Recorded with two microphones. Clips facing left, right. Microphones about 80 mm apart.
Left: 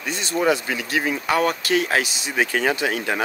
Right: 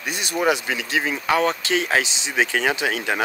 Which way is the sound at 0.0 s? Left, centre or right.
Centre.